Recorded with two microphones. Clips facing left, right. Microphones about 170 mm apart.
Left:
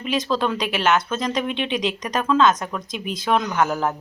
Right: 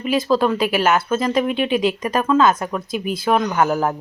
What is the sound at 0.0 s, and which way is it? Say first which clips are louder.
Speech: right 5 dB; 5° right (ahead or behind).